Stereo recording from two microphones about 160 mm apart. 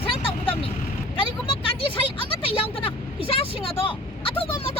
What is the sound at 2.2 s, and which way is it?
Vehicle, 35° left (ahead or behind).